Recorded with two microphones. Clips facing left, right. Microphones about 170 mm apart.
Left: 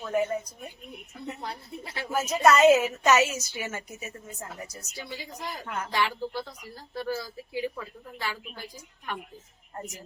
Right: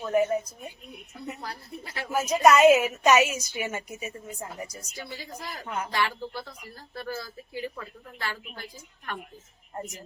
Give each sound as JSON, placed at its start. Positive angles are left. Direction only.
{"t": 0.0, "sound": "a woman's voice", "side_deg": -10}
{"t": 1.4, "sound": "speech", "side_deg": 25}
{"t": 2.1, "sound": "a woman's voice", "side_deg": -15}
{"t": 4.9, "sound": "speech", "side_deg": 15}
{"t": 5.6, "sound": "speech", "side_deg": -20}
{"t": 5.9, "sound": "speech", "side_deg": 15}